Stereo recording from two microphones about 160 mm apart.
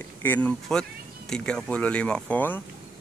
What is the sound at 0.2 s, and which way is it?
Speech, 10° left (ahead or behind).